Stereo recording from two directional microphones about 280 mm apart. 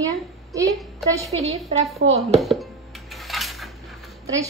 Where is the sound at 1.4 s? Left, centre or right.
Right.